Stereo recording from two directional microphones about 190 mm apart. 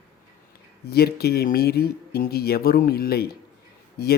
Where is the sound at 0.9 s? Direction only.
55° left (ahead or behind).